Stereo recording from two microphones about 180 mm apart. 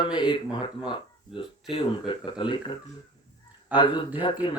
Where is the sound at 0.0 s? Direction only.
25° left (ahead or behind).